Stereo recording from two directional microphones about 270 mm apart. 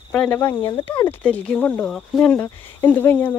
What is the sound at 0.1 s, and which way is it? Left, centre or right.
Speech, centre.